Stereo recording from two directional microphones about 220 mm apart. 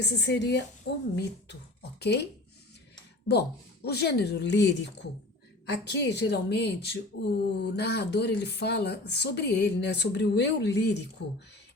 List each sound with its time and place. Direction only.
0.0 s speech: 50° left (ahead or behind)
3.8 s speech: 45° left (ahead or behind)